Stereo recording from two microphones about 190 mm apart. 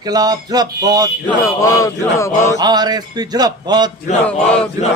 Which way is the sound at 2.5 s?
20° right (ahead or behind).